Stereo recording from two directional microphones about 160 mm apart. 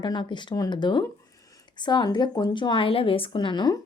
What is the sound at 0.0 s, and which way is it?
A woman's voice, 30° left (ahead or behind).